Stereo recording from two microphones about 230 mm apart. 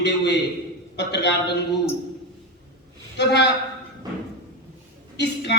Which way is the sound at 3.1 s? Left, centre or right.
Left.